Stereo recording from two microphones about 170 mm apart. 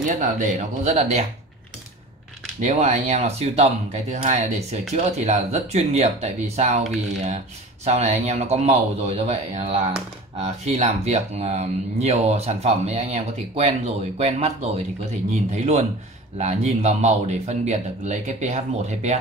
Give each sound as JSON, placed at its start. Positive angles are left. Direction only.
{"t": 0.2, "sound": "speech", "side_deg": -45}
{"t": 2.6, "sound": "speech", "side_deg": -45}
{"t": 7.8, "sound": "speech", "side_deg": -40}